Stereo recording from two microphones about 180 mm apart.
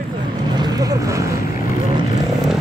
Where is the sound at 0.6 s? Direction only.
20° right (ahead or behind).